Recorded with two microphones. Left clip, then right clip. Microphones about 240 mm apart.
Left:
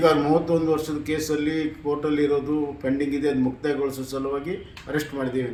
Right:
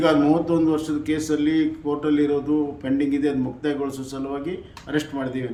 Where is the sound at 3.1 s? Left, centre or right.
Centre.